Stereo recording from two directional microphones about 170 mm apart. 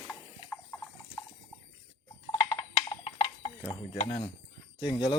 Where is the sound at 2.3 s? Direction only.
20° left (ahead or behind).